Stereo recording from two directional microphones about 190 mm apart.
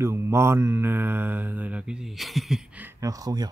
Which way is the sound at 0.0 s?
15° right (ahead or behind).